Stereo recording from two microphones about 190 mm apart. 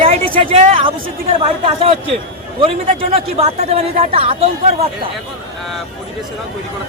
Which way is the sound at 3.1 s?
30° right (ahead or behind).